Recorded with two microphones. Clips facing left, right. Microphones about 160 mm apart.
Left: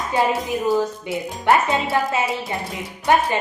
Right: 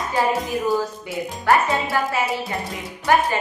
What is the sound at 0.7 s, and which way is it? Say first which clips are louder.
A woman's voice: left 2 dB; 20° left (ahead or behind).